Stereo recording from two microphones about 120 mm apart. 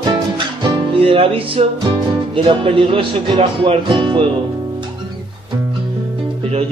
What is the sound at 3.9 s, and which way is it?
Music, 40° right (ahead or behind).